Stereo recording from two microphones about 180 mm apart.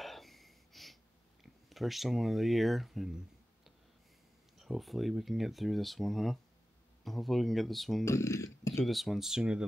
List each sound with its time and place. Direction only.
0.0 s gasp: centre (ahead or behind)
1.4 s speech: centre (ahead or behind)
4.6 s speech: centre (ahead or behind)
8.0 s speech: 15° left (ahead or behind)
8.8 s speech: centre (ahead or behind)